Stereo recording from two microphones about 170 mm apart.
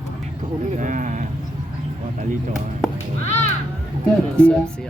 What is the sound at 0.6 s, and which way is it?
Speech, 45° right (ahead or behind).